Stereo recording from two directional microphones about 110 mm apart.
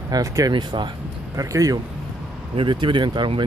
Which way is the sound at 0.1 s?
35° right (ahead or behind).